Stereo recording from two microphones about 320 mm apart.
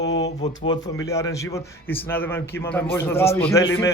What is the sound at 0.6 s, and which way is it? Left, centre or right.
A man's voice, centre.